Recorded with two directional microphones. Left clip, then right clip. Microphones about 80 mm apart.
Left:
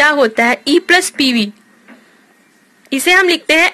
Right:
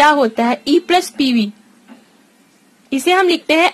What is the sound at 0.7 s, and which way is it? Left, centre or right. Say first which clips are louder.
Speech: left 3 dB; right.